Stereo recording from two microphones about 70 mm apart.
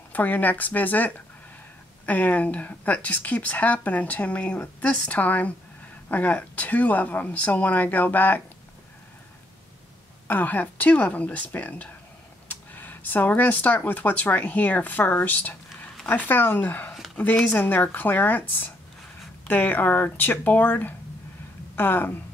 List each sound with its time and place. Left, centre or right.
0.1 s speech: left
10.2 s speech: left
16.9 s a sound: centre
17.5 s speech: left